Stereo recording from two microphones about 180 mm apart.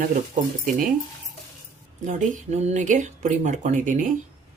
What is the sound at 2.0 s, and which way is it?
A woman's voice, 45° right (ahead or behind).